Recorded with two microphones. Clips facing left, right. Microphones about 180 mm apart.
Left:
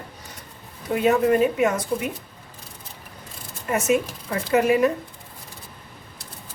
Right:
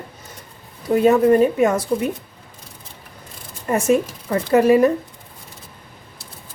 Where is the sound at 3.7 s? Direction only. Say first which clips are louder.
Right 4 dB; 35° right (ahead or behind).